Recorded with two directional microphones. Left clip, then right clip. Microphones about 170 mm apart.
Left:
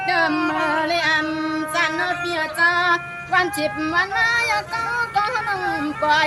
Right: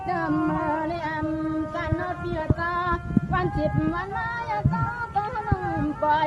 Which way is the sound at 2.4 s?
15° left (ahead or behind).